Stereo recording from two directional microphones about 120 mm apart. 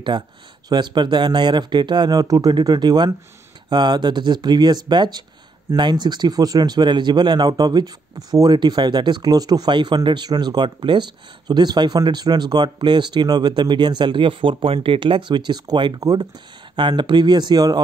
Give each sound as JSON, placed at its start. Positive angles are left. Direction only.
{"t": 0.1, "sound": "speech", "side_deg": -35}